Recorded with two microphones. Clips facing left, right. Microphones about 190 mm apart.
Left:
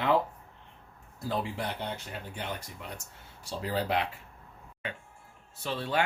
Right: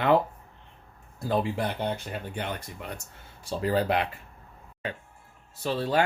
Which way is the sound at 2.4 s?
60° right (ahead or behind).